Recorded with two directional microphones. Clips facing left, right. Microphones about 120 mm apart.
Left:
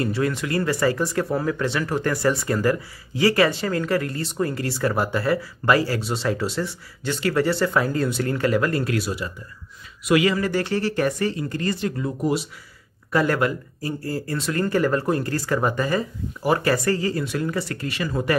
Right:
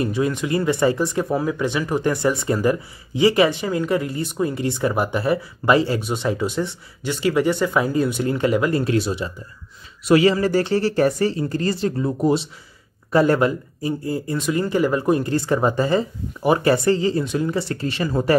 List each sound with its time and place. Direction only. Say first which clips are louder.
0.0 s speech: right 2 dB; 20° right (ahead or behind)